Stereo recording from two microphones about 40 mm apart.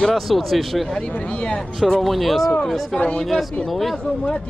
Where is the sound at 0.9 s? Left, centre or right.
Left.